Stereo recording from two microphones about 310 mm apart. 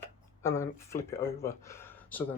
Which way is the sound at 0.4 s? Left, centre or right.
Centre.